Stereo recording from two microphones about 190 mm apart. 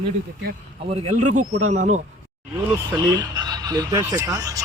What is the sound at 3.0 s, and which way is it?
Speech, 20° right (ahead or behind).